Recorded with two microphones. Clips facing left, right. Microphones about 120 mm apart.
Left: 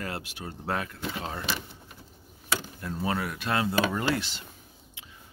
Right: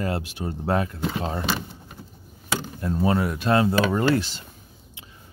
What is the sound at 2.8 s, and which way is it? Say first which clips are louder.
Speech: right 10 dB; 35° right (ahead or behind).